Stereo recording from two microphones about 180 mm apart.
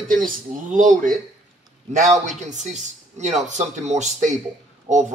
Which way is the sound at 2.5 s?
40° right (ahead or behind).